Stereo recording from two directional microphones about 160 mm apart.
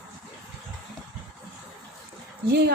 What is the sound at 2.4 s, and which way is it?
Speech, 90° right.